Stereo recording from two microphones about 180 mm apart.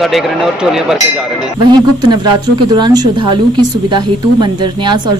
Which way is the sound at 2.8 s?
20° right (ahead or behind).